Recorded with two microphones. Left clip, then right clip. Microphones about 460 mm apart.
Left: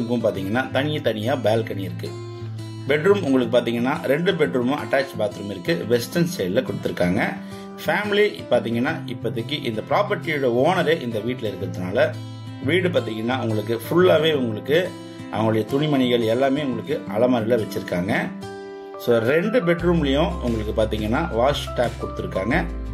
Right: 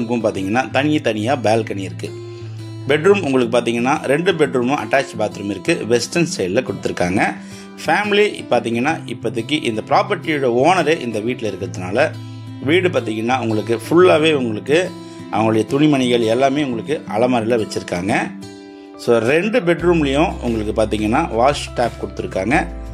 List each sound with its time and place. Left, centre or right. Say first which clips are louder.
0.1 s speech: right 4 dB; left
2.9 s speech: right 4 dB; left